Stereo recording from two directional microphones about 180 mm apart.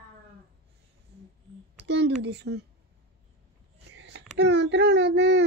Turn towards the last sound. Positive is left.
turn(degrees=-75)  # may be behind; listen again after turning